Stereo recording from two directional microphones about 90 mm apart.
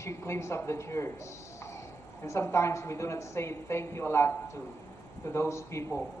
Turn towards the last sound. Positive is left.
turn(degrees=30)  # may be behind; listen again after turning